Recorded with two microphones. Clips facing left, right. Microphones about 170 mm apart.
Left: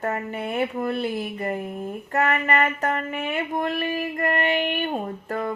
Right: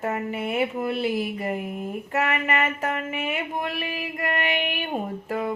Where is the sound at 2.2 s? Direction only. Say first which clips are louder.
Left 5 dB; 40° left (ahead or behind).